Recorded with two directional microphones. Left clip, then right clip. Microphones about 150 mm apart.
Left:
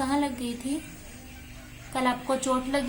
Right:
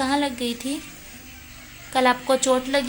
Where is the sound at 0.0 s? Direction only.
30° right (ahead or behind).